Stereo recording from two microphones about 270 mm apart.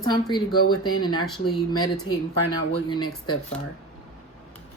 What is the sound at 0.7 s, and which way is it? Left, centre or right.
Speech, centre.